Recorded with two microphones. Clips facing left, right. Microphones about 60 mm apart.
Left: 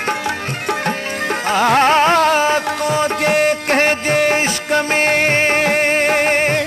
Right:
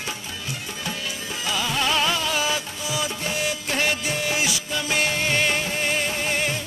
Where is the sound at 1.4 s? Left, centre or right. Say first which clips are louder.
Left 12 dB; left.